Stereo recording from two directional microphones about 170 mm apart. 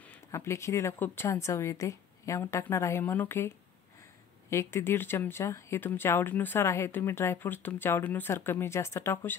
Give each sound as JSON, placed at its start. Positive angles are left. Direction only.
{"t": 0.0, "sound": "speech", "side_deg": 15}